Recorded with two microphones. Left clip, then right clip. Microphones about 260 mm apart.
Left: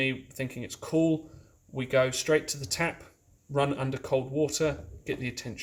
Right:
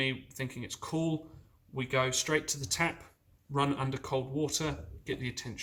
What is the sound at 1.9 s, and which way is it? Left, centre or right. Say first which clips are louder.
Speech: left 5 dB; right.